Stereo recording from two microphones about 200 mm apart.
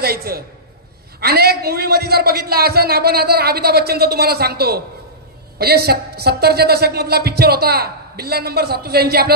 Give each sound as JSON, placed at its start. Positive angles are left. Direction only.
{"t": 0.0, "sound": "a woman's voice", "side_deg": -50}